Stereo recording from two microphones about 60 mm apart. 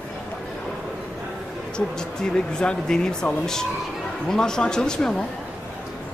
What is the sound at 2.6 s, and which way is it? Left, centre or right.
A man's voice, centre.